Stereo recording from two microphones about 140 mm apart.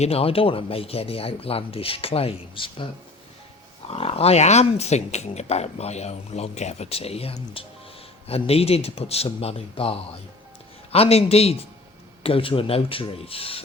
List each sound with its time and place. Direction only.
0.0 s speech: 45° left (ahead or behind)
3.8 s speech: 45° left (ahead or behind)
10.9 s speech: 45° left (ahead or behind)